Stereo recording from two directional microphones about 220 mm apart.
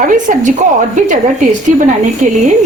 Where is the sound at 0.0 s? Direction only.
35° right (ahead or behind).